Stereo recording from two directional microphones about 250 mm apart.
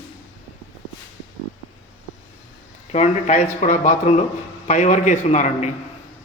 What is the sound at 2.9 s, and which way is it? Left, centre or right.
A man's voice, left.